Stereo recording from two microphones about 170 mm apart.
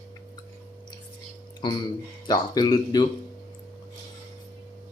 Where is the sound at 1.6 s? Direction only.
25° left (ahead or behind).